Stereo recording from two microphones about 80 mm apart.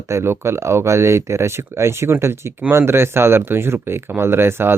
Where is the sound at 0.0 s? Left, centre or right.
Right.